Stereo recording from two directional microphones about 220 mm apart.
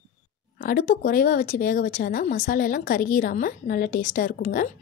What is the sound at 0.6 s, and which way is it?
Speech, 40° left (ahead or behind).